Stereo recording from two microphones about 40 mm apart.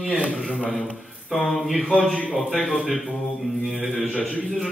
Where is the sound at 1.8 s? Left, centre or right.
Centre.